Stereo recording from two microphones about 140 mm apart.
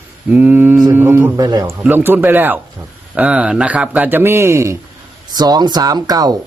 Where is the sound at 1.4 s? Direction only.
25° right (ahead or behind).